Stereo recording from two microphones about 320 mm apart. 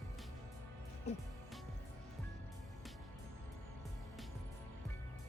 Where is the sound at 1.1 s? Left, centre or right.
Left.